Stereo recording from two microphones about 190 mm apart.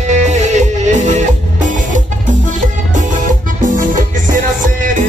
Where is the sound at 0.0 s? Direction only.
40° right (ahead or behind).